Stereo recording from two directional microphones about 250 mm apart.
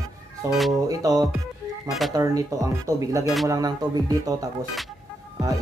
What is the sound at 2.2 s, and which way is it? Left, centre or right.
Speech, centre.